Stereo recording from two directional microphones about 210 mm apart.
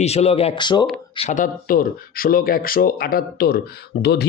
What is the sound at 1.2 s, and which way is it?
Speech, 35° left (ahead or behind).